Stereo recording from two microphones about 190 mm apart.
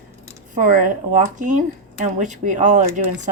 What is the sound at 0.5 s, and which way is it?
A woman's voice, 45° right (ahead or behind).